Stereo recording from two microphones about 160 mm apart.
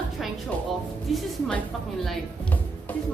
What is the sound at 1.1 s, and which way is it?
Speech, 5° left (ahead or behind).